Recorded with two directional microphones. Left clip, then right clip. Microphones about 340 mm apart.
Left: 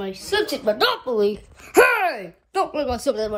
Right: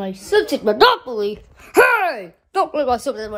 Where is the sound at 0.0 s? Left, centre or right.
Right.